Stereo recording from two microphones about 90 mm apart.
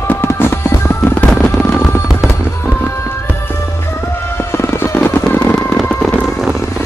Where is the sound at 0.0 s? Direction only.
25° left (ahead or behind).